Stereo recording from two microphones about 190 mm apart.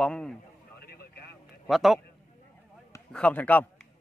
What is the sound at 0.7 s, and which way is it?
Vehicle, 55° left (ahead or behind).